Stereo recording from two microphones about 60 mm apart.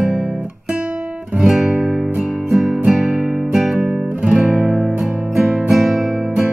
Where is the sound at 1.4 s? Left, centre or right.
Centre.